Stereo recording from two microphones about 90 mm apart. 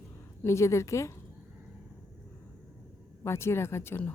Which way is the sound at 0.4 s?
30° left (ahead or behind).